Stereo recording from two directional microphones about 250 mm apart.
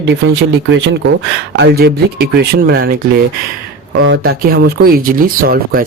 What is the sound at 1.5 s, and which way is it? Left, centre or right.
Speech, right.